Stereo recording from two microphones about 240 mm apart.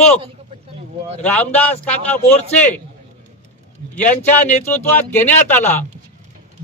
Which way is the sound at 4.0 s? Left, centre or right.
Left.